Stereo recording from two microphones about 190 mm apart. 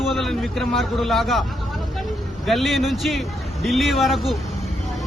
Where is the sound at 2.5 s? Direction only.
Centre (ahead or behind).